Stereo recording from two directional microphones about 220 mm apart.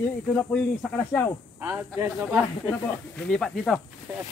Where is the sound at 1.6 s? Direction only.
10° right (ahead or behind).